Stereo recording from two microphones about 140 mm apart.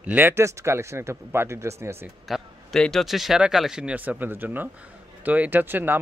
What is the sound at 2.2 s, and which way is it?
Speech, centre (ahead or behind).